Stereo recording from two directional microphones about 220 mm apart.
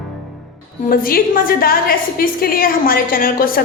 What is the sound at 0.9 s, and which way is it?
A woman's voice, 40° left (ahead or behind).